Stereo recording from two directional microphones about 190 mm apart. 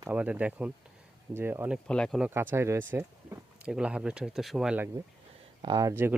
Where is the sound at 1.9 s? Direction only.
5° left (ahead or behind).